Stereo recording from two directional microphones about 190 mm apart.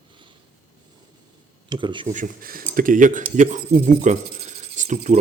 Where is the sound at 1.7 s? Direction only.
25° right (ahead or behind).